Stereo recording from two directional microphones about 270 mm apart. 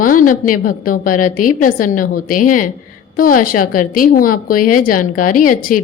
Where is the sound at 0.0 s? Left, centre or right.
Left.